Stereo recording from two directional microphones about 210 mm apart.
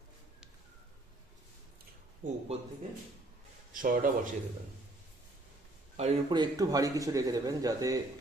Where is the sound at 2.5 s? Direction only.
30° right (ahead or behind).